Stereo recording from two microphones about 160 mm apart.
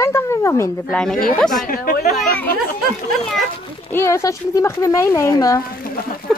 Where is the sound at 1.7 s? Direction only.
60° left (ahead or behind).